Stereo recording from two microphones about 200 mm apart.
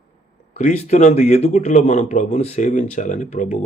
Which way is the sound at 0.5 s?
35° left (ahead or behind).